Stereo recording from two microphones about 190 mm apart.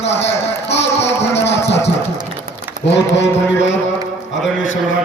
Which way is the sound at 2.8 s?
65° left (ahead or behind).